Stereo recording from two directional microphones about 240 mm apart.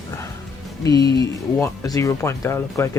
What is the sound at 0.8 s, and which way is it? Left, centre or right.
Speech, centre.